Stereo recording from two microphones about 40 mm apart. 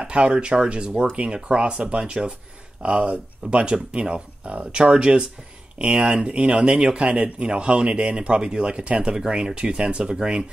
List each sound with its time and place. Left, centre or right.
0.0 s speech: right